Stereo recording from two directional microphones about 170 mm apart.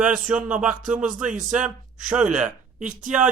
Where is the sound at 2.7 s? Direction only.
50° right (ahead or behind).